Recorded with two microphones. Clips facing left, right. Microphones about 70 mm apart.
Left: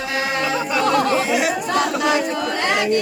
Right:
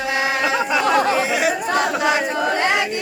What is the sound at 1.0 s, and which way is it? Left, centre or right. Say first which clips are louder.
Chatter: even; right.